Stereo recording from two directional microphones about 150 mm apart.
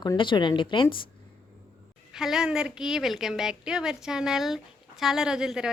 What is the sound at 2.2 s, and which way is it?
A woman's voice, 5° right (ahead or behind).